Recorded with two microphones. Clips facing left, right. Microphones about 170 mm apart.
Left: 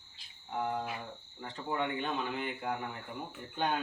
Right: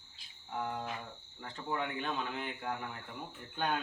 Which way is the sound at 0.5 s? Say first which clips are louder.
Left 3 dB; 10° left (ahead or behind).